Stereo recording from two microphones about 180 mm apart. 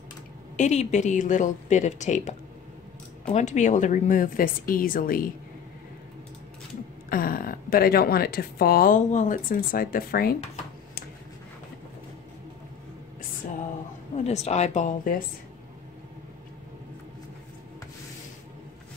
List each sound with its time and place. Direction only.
0.6 s a woman's voice: 40° left (ahead or behind)
7.1 s speech: 55° left (ahead or behind)
14.1 s a woman's voice: 40° left (ahead or behind)